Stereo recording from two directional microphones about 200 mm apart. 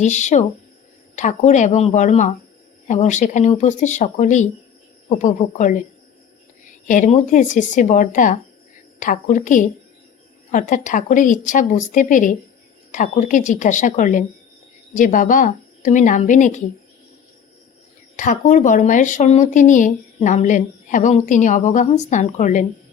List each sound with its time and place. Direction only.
0.0 s speech: 35° left (ahead or behind)
18.2 s speech: 40° left (ahead or behind)